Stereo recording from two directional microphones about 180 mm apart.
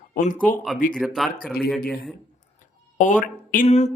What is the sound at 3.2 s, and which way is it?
Speech, 50° left (ahead or behind).